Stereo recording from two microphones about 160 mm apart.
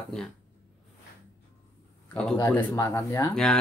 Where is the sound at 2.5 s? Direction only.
20° left (ahead or behind).